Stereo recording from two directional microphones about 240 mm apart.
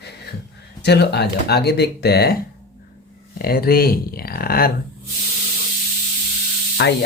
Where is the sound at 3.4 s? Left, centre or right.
Left.